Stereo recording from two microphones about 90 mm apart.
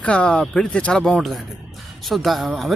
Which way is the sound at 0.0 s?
15° left (ahead or behind).